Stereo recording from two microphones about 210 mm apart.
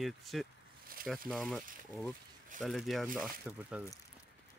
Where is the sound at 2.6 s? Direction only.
Centre (ahead or behind).